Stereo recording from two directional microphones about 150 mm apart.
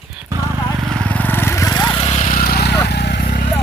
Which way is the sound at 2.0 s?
45° left (ahead or behind).